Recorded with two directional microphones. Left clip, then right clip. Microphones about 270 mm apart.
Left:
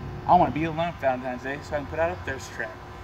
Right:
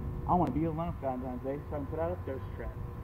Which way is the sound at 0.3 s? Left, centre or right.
Left.